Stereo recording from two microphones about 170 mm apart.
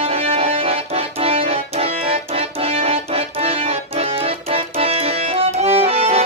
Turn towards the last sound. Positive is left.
turn(degrees=-35)  # may be behind; listen again after turning